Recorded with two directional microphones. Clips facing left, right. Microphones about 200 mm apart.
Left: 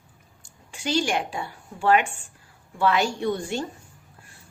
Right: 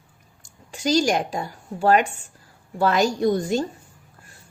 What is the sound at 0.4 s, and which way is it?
A woman's voice, 40° right (ahead or behind).